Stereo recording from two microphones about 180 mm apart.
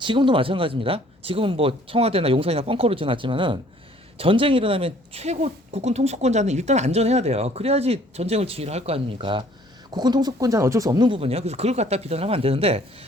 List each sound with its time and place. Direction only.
0.0 s speech: 25° right (ahead or behind)